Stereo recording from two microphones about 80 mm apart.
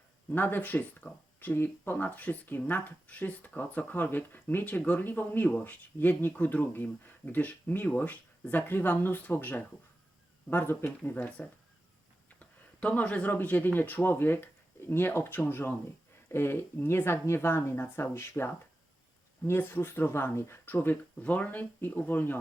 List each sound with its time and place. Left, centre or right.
0.3 s a woman's voice: left